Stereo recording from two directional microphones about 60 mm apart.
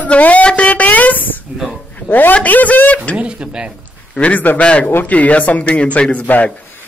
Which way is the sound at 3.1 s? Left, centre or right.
Centre.